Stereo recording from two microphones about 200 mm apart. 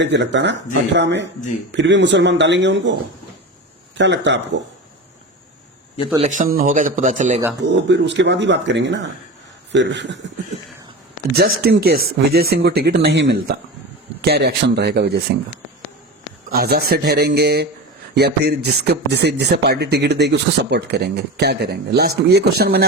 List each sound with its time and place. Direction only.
0.0 s speech: 60° right (ahead or behind)
3.9 s speech: 60° right (ahead or behind)
6.2 s speech: 40° right (ahead or behind)
7.7 s speech: 60° right (ahead or behind)
11.3 s speech: 55° right (ahead or behind)
16.5 s speech: 50° right (ahead or behind)